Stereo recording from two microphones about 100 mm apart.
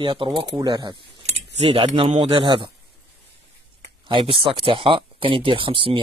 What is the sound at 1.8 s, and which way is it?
Speech, 70° right (ahead or behind).